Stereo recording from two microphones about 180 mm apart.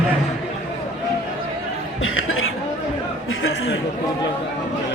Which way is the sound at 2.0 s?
90° left.